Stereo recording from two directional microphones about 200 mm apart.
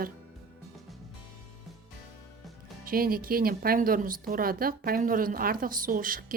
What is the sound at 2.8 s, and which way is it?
Speech, 45° right (ahead or behind).